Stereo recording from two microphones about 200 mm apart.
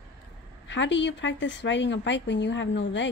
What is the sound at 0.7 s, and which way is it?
A woman's voice, 65° left (ahead or behind).